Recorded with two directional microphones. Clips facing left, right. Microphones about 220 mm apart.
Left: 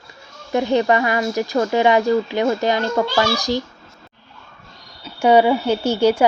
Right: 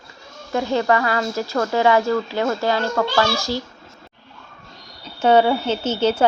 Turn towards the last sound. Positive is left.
turn(degrees=10)  # may be behind; listen again after turning